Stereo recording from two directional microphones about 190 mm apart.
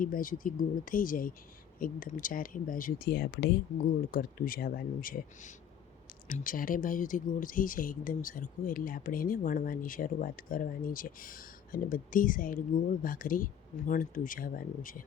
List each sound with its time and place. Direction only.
0.0 s speech: 45° left (ahead or behind)